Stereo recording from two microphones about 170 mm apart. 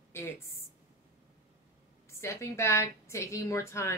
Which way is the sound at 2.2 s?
15° left (ahead or behind).